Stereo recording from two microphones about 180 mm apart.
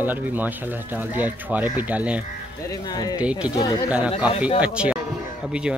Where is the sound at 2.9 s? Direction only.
20° left (ahead or behind).